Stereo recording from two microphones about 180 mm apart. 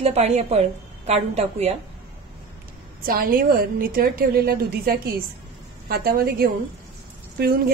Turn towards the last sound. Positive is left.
turn(degrees=-60)  # may be behind; listen again after turning